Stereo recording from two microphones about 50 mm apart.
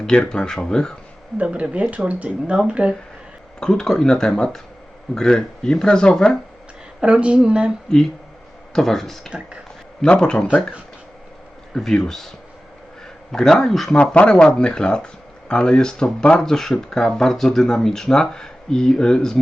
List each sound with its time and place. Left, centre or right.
0.3 s speech: centre
1.4 s speech: right
3.6 s speech: centre
7.0 s speech: right
7.9 s speech: centre
11.7 s speech: centre
13.3 s speech: centre
13.9 s speech: left